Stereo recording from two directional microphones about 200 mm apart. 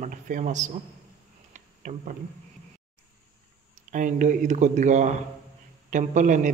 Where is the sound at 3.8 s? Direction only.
40° right (ahead or behind).